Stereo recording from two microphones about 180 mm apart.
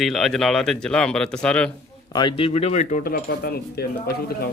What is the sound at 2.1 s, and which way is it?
Speech, 25° left (ahead or behind).